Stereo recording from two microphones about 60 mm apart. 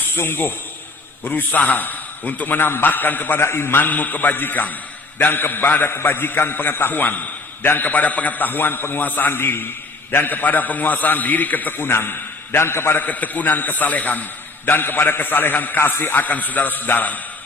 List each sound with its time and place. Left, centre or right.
0.2 s a man's voice: left
13.1 s a man's voice: left